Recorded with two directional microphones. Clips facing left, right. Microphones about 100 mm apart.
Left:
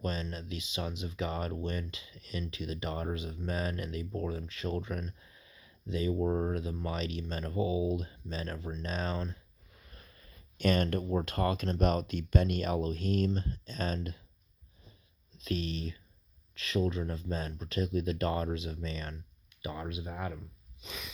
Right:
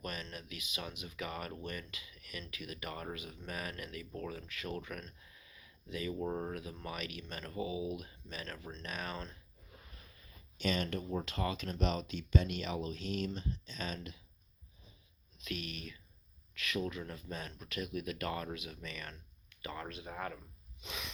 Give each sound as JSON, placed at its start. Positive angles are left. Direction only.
{"t": 0.0, "sound": "speech", "side_deg": 25}
{"t": 10.6, "sound": "speech", "side_deg": 50}
{"t": 15.4, "sound": "speech", "side_deg": 35}
{"t": 19.6, "sound": "speech", "side_deg": 15}
{"t": 20.8, "sound": "a sound", "side_deg": 0}